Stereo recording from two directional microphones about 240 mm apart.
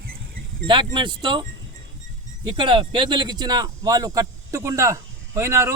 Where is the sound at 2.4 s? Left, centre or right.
Centre.